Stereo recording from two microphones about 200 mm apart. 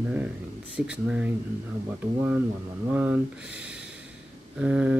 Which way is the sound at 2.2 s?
10° right (ahead or behind).